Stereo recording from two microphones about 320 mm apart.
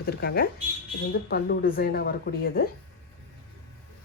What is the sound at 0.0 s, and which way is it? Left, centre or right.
Speech, left.